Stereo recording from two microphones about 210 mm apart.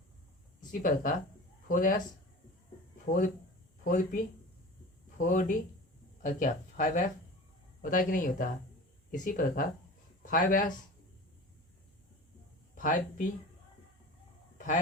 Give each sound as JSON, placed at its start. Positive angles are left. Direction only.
{"t": 0.7, "sound": "speech", "side_deg": 40}
{"t": 3.1, "sound": "speech", "side_deg": 40}
{"t": 12.7, "sound": "speech", "side_deg": 40}